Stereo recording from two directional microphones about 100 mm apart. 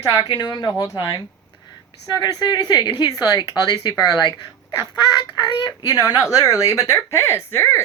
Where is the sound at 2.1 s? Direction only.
45° left (ahead or behind).